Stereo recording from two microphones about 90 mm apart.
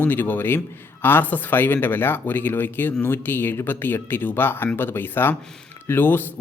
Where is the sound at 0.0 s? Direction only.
20° left (ahead or behind).